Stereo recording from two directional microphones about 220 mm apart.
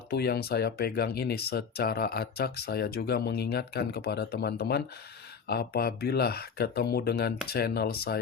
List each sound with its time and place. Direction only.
0.1 s speech: 45° left (ahead or behind)